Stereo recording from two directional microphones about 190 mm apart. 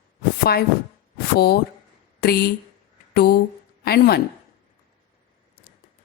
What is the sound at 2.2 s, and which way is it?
Speech, 55° left (ahead or behind).